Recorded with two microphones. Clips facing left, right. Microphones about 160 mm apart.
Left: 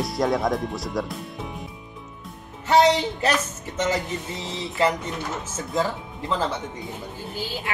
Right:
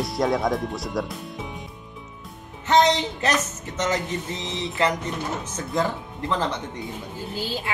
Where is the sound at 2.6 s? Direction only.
10° left (ahead or behind).